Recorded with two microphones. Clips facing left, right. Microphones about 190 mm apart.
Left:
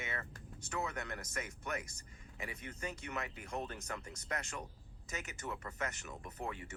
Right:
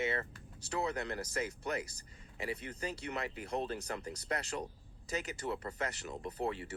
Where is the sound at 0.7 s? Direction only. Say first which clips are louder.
Right 5 dB; 30° right (ahead or behind).